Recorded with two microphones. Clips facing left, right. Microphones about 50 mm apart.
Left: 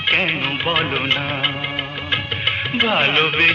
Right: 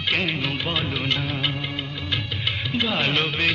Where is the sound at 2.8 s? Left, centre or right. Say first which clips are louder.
Left 6 dB; left.